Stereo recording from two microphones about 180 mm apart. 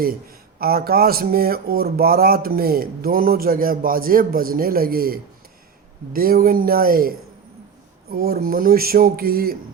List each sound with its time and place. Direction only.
0.0 s speech: 55° right (ahead or behind)
8.1 s speech: 55° right (ahead or behind)